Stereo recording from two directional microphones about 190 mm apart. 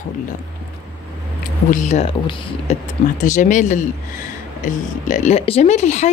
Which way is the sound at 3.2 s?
40° left (ahead or behind).